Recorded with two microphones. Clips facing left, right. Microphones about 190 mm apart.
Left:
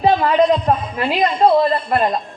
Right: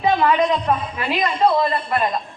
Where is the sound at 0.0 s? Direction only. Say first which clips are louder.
Left 3 dB; 40° left (ahead or behind).